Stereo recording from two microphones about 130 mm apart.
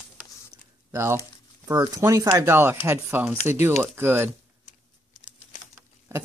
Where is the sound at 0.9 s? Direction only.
20° right (ahead or behind).